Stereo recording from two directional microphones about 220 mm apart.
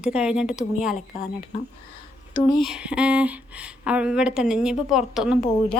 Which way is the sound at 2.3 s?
20° left (ahead or behind).